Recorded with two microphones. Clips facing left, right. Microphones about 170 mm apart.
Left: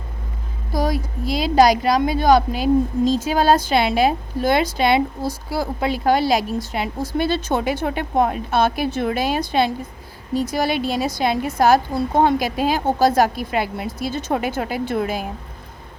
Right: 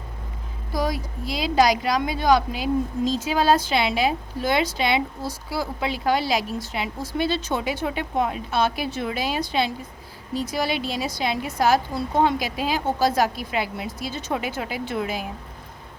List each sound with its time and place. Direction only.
0.7 s a woman's voice: 40° left (ahead or behind)